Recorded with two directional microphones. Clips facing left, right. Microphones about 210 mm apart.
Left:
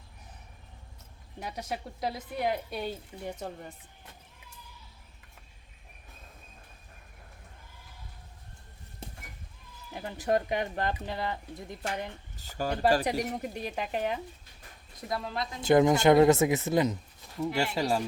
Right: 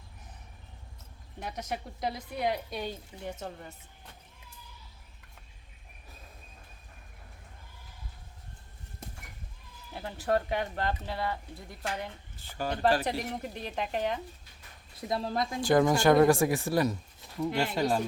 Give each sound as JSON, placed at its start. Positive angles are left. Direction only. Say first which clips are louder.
{"t": 1.4, "sound": "speech", "louder": "even", "side_deg": 10}
{"t": 9.9, "sound": "speech", "louder": "left 1 dB", "side_deg": 15}
{"t": 12.4, "sound": "speech", "louder": "left 2 dB", "side_deg": 40}
{"t": 13.1, "sound": "speech", "louder": "left 3 dB", "side_deg": 10}
{"t": 15.1, "sound": "speech", "louder": "right 3 dB", "side_deg": -35}
{"t": 15.6, "sound": "speech", "louder": "left 2 dB", "side_deg": 20}
{"t": 17.4, "sound": "speech", "louder": "right 1 dB", "side_deg": 5}